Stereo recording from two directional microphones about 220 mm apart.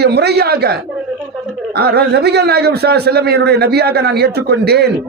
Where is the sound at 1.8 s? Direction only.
45° right (ahead or behind).